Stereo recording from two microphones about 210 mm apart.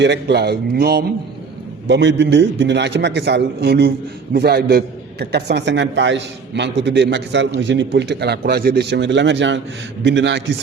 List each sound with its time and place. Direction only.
0.0 s a man's voice: 55° right (ahead or behind)